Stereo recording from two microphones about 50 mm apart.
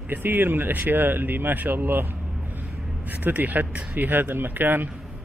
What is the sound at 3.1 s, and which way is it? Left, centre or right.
Speech, right.